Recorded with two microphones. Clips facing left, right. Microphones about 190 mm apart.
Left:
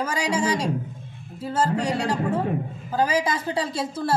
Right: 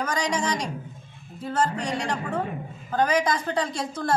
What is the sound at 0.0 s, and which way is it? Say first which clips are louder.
A woman's voice: left 2 dB; 5° left (ahead or behind).